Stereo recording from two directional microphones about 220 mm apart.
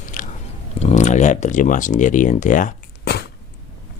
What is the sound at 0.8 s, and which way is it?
Speech, 30° left (ahead or behind).